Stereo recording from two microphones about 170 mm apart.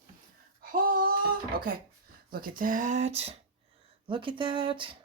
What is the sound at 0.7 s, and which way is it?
Speech, 60° right (ahead or behind).